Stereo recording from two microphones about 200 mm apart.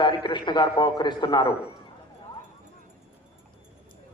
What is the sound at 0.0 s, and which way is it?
A man's voice, 20° left (ahead or behind).